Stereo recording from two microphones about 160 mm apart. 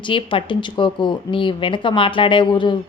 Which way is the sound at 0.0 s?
30° left (ahead or behind).